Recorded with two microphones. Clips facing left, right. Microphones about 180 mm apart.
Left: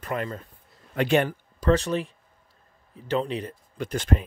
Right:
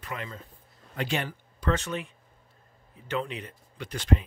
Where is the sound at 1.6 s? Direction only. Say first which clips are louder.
Left 7 dB; 35° left (ahead or behind).